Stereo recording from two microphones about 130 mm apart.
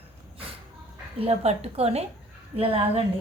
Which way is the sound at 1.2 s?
55° right (ahead or behind).